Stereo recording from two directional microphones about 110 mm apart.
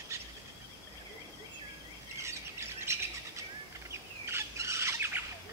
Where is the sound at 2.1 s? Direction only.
25° right (ahead or behind).